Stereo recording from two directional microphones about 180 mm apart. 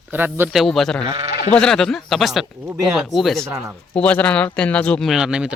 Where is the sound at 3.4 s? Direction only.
15° right (ahead or behind).